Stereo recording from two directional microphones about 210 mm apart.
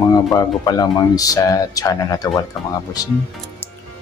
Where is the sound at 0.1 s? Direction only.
15° left (ahead or behind).